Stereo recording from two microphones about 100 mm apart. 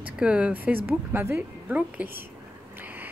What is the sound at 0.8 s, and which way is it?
Speech, 25° right (ahead or behind).